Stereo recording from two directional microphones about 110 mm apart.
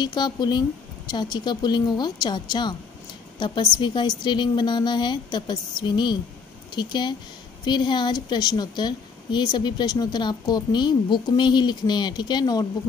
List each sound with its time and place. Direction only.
0.0 s a woman's voice: 40° left (ahead or behind)